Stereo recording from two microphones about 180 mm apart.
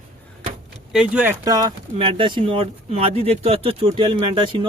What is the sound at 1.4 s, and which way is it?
Speech, 20° right (ahead or behind).